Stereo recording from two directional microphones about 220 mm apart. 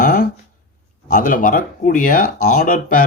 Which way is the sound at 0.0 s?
35° left (ahead or behind).